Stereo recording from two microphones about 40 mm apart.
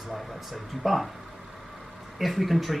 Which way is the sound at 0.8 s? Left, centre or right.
Centre.